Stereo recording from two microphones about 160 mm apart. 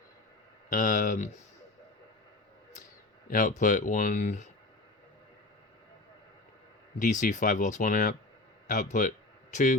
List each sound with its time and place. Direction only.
0.7 s speech: 50° left (ahead or behind)
3.2 s speech: 55° left (ahead or behind)
7.0 s speech: 50° left (ahead or behind)